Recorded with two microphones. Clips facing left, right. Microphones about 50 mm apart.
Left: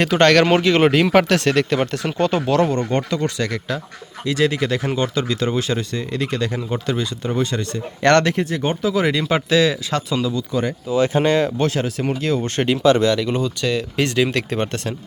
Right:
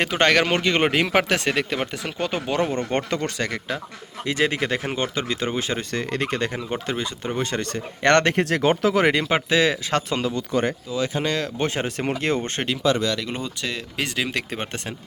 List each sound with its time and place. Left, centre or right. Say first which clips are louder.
0.0 s speech: left 5 dB; centre
2.9 s speech: left 3 dB; right
5.9 s speech: even; right
6.1 s speech: left 4 dB; right
8.4 s speech: right 2 dB; right
8.9 s speech: left 3 dB; right
9.3 s speech: left 3 dB; right
10.3 s speech: left 1 dB; right
10.9 s speech: left 10 dB; left
11.5 s speech: left 4 dB; right
11.9 s speech: left 3 dB; right
12.9 s speech: left 6 dB; left
13.6 s speech: left 7 dB; centre